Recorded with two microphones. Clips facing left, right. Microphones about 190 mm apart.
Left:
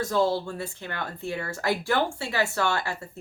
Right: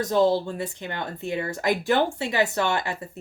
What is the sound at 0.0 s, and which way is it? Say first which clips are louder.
Speech: right 4 dB; 20° right (ahead or behind).